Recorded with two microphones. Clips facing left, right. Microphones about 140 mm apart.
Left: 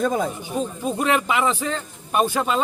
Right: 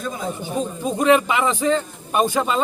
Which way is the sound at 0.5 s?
Centre (ahead or behind).